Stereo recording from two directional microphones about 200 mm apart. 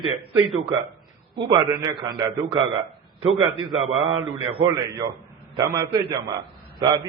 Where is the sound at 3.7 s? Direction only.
30° right (ahead or behind).